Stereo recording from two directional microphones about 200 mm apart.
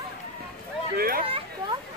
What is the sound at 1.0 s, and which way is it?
Chatter, 45° right (ahead or behind).